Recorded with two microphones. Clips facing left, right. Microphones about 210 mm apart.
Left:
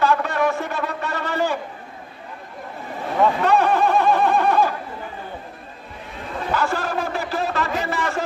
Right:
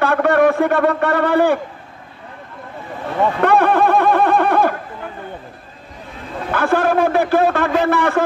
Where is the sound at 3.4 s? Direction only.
55° right (ahead or behind).